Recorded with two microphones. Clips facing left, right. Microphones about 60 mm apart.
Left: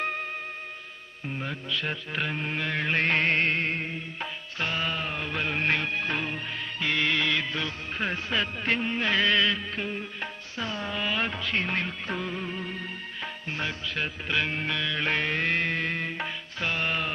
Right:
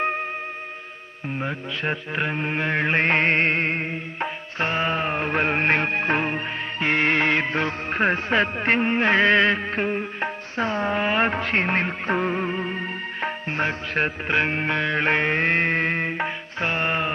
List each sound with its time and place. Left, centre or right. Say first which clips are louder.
1.4 s music: right 4 dB; right